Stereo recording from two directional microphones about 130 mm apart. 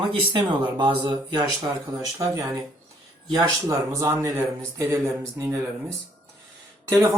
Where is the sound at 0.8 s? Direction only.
35° right (ahead or behind).